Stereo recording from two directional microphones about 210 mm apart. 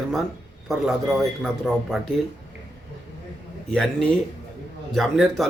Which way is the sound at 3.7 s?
5° left (ahead or behind).